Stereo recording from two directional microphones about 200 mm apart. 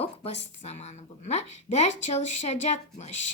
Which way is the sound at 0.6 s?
35° left (ahead or behind).